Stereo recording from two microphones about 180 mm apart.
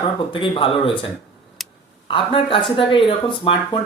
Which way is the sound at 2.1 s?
30° left (ahead or behind).